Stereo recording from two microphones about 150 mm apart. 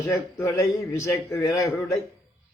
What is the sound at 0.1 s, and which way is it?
Speech, 20° left (ahead or behind).